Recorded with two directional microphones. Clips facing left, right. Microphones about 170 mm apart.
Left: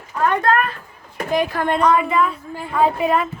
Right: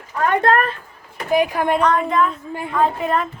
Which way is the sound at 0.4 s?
35° right (ahead or behind).